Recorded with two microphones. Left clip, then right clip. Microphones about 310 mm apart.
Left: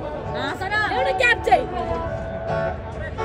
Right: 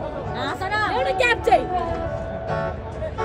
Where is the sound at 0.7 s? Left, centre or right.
Centre.